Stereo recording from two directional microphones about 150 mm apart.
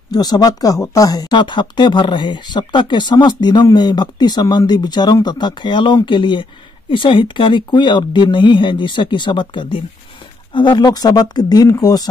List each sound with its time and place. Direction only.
0.1 s speech: 25° left (ahead or behind)